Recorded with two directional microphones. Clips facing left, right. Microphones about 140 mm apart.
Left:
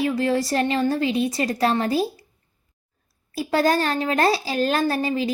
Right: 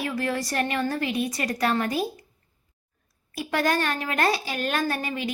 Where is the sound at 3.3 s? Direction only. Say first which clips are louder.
Left 5 dB; 30° left (ahead or behind).